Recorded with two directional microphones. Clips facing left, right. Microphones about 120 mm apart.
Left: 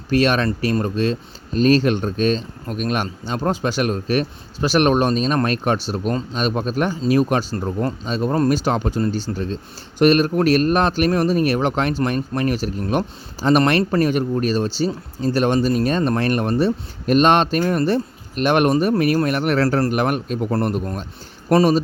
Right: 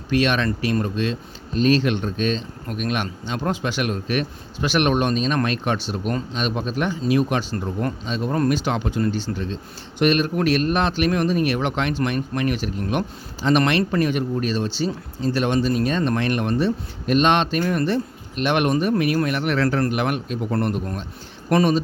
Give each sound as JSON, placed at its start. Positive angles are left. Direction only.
{"t": 0.1, "sound": "a man's voice", "side_deg": 40}